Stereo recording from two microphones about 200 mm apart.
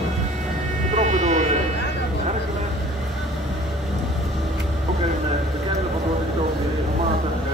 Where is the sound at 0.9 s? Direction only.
35° right (ahead or behind).